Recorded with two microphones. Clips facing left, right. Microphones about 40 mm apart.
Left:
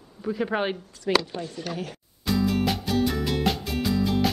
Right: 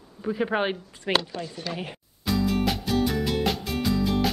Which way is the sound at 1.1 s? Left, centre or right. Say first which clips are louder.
Left 2 dB; right.